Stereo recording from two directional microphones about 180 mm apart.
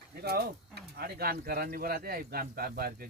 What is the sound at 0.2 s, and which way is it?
Speech, 60° right (ahead or behind).